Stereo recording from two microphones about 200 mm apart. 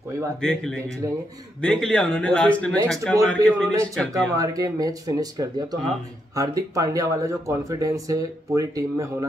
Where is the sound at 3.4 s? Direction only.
15° right (ahead or behind).